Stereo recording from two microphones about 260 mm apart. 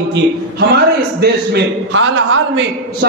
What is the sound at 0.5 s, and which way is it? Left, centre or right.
A man's voice, right.